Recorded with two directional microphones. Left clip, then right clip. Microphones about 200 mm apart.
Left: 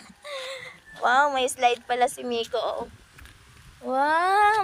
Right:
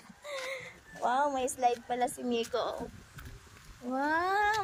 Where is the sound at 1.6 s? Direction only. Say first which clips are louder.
Left 7 dB; 20° left (ahead or behind).